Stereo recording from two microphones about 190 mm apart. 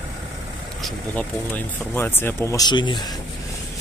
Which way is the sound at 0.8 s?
10° left (ahead or behind).